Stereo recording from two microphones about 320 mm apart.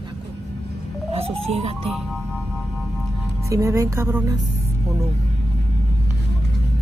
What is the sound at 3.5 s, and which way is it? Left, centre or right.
Speech, centre.